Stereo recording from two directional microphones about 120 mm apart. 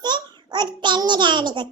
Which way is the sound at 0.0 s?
35° right (ahead or behind).